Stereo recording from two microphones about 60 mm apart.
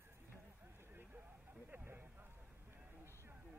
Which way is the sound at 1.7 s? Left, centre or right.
Right.